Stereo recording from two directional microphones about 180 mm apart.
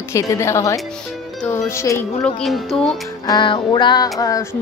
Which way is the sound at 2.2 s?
Centre (ahead or behind).